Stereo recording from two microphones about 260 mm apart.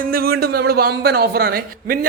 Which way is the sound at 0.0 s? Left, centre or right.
Right.